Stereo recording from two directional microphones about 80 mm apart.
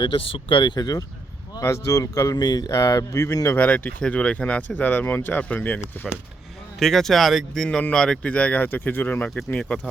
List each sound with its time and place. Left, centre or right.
0.0 s speech: left
1.6 s speech: left
2.3 s speech: left
3.6 s speech: left
6.7 s speech: centre